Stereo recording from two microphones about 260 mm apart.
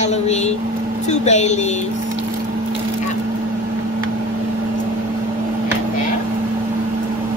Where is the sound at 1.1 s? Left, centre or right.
Left.